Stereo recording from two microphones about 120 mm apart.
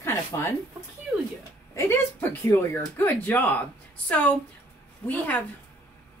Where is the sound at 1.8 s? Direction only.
20° left (ahead or behind).